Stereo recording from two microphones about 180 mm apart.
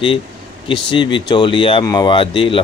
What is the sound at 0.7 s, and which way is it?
Speech, 25° left (ahead or behind).